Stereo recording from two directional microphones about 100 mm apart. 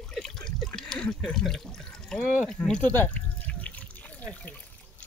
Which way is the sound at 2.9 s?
20° left (ahead or behind).